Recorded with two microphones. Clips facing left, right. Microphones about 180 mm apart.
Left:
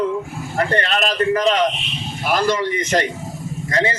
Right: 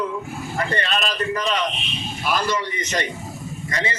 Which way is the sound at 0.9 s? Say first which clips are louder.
Left 6 dB; 50° left (ahead or behind).